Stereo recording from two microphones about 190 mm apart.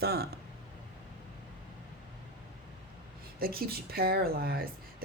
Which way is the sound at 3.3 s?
50° right (ahead or behind).